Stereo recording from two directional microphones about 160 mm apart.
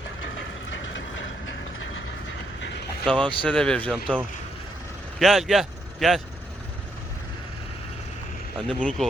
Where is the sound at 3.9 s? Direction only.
5° right (ahead or behind).